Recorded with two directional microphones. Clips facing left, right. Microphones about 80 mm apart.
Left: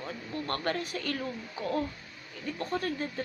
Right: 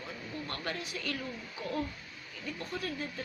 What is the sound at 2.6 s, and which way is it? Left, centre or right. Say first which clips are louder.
Speech: left 6 dB; left.